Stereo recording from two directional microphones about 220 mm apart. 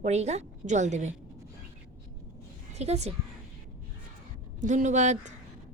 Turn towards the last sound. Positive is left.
turn(degrees=-30)  # may be behind; listen again after turning